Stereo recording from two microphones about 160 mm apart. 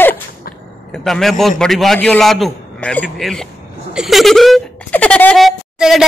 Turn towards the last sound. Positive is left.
turn(degrees=0)  # may be behind; listen again after turning